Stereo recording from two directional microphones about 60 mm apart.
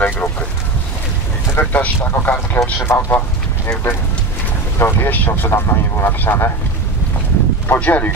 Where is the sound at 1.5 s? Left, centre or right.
Left.